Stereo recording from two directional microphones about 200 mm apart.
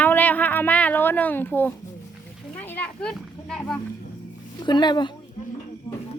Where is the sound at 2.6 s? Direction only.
10° left (ahead or behind).